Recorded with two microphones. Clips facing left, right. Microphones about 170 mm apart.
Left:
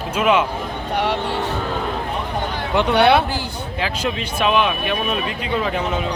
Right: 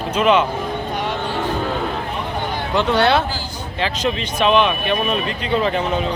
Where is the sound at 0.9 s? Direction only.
70° left (ahead or behind).